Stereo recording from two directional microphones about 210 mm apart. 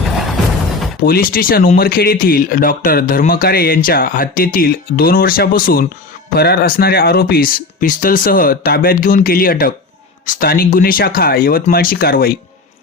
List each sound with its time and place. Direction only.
1.0 s speech: 45° left (ahead or behind)